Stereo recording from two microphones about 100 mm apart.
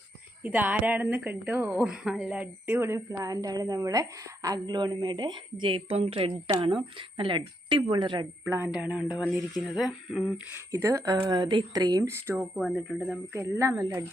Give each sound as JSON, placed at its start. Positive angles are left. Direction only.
{"t": 0.4, "sound": "speech", "side_deg": -15}
{"t": 1.9, "sound": "a woman's voice", "side_deg": -5}
{"t": 6.6, "sound": "speech", "side_deg": -55}
{"t": 8.4, "sound": "a woman's voice", "side_deg": -20}
{"t": 10.7, "sound": "a woman's voice", "side_deg": -30}
{"t": 11.3, "sound": "speech", "side_deg": -50}
{"t": 12.0, "sound": "a woman's voice", "side_deg": -25}
{"t": 12.4, "sound": "speech", "side_deg": -5}
{"t": 13.3, "sound": "a woman's voice", "side_deg": -25}